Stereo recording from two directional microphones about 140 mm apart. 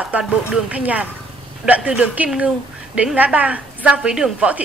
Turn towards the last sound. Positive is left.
turn(degrees=-10)  # may be behind; listen again after turning